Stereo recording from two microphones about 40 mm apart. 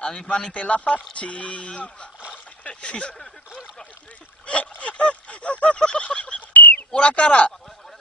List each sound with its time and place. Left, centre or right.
0.0 s a man's voice: left
0.5 s speech: left
4.5 s a sound: left
5.8 s goose: left
6.5 s a sound: left
6.9 s speech: left